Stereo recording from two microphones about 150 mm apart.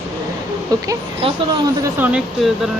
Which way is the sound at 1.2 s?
40° right (ahead or behind).